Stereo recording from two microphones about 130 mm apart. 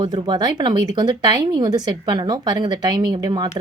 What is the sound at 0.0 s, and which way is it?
A woman's voice, 35° right (ahead or behind).